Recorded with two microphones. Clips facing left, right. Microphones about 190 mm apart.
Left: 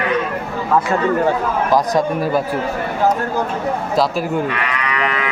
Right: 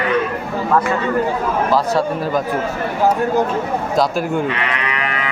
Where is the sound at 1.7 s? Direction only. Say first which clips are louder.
Left 4 dB; 15° left (ahead or behind).